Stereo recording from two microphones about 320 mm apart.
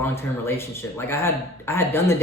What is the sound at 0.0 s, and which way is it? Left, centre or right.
A man's voice, centre.